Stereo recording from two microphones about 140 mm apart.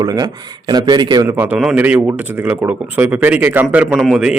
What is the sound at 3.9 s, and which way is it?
Speech, centre (ahead or behind).